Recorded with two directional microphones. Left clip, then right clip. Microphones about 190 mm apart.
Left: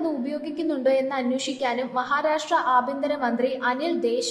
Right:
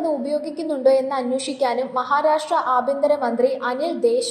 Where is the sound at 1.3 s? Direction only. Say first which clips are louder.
Right 4 dB; 5° right (ahead or behind).